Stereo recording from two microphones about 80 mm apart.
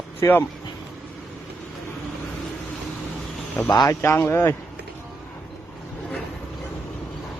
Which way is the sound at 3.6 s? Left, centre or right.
Left.